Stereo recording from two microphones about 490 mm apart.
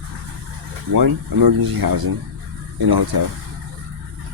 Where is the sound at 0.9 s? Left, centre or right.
Right.